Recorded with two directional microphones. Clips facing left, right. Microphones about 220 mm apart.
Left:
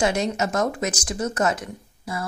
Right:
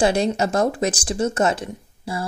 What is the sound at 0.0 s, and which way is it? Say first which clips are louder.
A woman's voice: right 4 dB; 30° right (ahead or behind).